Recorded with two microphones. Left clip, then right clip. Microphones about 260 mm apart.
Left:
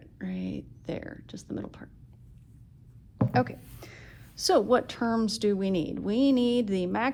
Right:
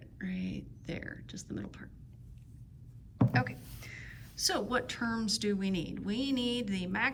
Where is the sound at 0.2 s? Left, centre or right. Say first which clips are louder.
Left 4 dB; centre.